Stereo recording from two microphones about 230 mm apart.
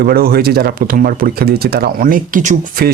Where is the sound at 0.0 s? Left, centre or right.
Right.